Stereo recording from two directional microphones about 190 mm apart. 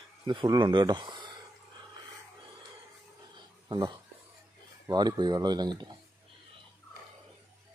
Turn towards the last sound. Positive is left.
turn(degrees=-20)  # may be behind; listen again after turning